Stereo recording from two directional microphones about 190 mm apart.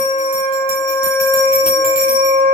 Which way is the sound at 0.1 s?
35° left (ahead or behind).